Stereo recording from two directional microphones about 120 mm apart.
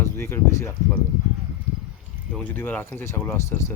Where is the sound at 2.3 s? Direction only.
15° left (ahead or behind).